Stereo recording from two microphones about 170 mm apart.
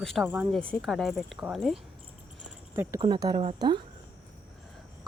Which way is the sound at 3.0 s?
25° right (ahead or behind).